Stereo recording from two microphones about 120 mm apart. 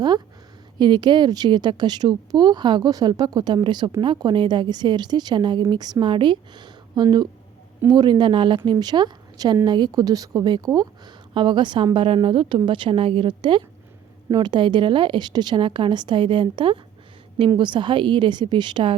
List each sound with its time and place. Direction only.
0.8 s a woman's voice: 40° right (ahead or behind)